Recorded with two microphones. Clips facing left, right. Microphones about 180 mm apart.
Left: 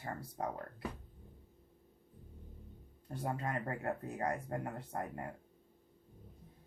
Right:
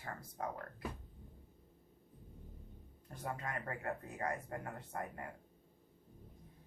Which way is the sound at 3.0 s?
30° left (ahead or behind).